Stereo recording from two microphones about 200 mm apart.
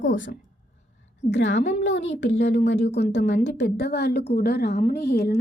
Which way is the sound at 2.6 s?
55° left (ahead or behind).